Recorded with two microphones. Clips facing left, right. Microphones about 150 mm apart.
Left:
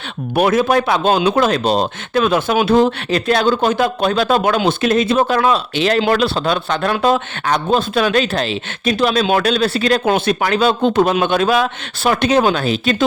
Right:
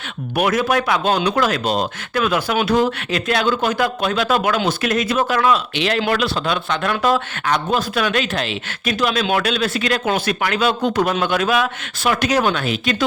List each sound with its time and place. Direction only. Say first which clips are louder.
0.3 s speech: left 4 dB; 30° left (ahead or behind)